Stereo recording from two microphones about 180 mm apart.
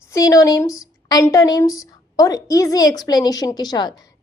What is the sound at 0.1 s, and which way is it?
A woman's voice, 20° left (ahead or behind).